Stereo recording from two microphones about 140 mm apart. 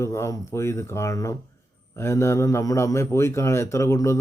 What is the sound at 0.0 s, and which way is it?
A man's voice, 20° left (ahead or behind).